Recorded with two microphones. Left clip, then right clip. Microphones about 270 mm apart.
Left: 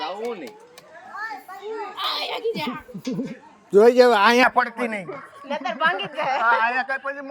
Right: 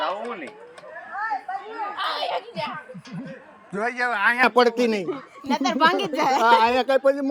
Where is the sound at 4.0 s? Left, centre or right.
Left.